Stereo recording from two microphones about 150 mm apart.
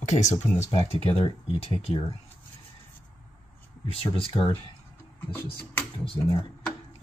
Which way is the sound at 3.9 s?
40° left (ahead or behind).